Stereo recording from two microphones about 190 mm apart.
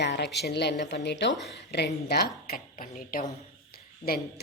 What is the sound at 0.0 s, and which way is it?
A woman's voice, 60° left (ahead or behind).